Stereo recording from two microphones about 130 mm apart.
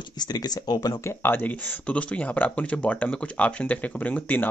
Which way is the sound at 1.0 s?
15° left (ahead or behind).